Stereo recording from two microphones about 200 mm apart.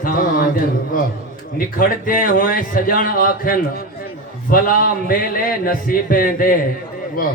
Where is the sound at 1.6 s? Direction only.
45° left (ahead or behind).